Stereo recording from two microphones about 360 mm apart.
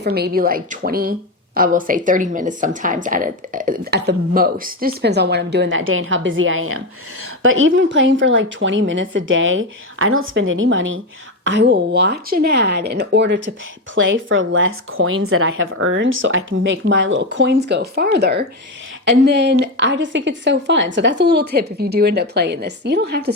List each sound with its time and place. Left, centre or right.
0.0 s a woman's voice: right